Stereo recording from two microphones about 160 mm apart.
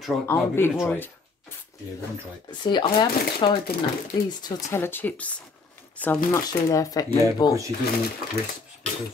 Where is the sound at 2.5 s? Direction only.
30° left (ahead or behind).